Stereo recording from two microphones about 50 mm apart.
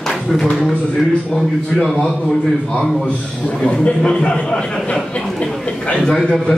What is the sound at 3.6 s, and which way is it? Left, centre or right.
Speech, left.